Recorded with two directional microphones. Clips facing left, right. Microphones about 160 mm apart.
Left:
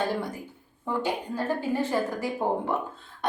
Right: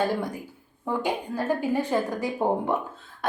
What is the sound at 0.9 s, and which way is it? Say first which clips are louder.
A woman's voice: right 1 dB; 15° right (ahead or behind).